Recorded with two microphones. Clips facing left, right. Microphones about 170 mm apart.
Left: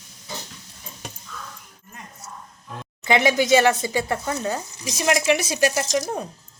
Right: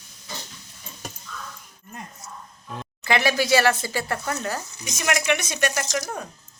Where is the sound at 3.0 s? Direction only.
20° left (ahead or behind).